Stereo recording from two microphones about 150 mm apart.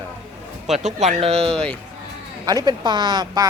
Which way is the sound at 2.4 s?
25° right (ahead or behind).